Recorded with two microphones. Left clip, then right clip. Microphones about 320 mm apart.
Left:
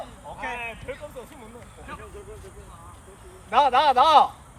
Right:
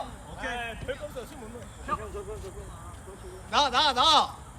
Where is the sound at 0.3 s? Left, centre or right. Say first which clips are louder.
Left 2 dB; centre.